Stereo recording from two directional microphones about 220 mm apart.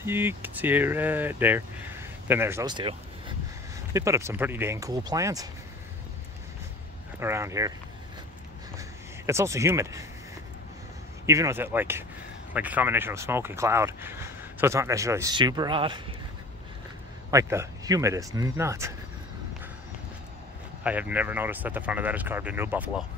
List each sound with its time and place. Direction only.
0.0 s speech: 10° right (ahead or behind)
7.2 s speech: 10° right (ahead or behind)
8.7 s a sound: 10° right (ahead or behind)
11.2 s speech: 15° right (ahead or behind)
17.3 s speech: 15° right (ahead or behind)
20.8 s speech: 5° right (ahead or behind)